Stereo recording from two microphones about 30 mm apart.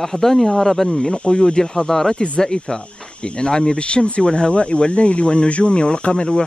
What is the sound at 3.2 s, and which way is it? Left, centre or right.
Speech, left.